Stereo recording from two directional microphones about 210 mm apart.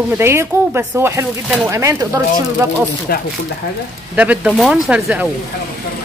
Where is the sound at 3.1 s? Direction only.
45° left (ahead or behind).